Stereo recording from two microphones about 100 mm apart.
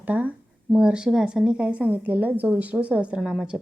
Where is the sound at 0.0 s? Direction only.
15° right (ahead or behind).